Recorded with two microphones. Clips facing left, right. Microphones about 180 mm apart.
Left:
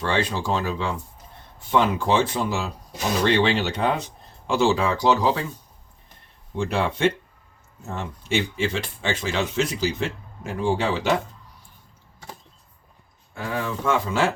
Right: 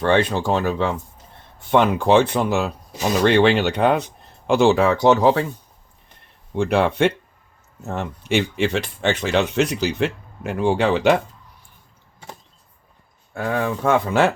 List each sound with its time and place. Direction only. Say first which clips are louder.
0.0 s speech: right 6 dB; 55° right (ahead or behind)
6.6 s speech: right 5 dB; 60° right (ahead or behind)
13.3 s speech: right 5 dB; 50° right (ahead or behind)